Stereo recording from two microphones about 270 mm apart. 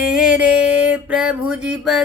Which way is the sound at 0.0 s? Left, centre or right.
Centre.